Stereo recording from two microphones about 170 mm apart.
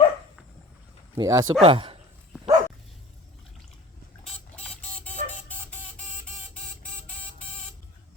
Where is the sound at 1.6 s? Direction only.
30° right (ahead or behind).